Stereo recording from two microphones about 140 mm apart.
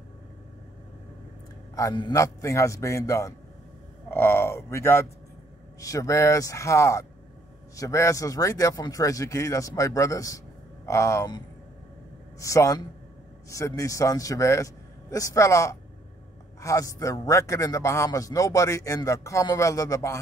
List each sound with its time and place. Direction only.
1.8 s a man's voice: 30° left (ahead or behind)
4.1 s a sound: 15° left (ahead or behind)
5.8 s a man's voice: 25° left (ahead or behind)